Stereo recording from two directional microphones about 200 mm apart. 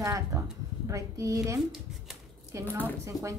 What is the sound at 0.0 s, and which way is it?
A woman's voice, 15° right (ahead or behind).